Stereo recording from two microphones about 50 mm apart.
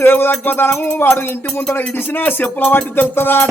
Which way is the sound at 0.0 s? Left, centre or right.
Left.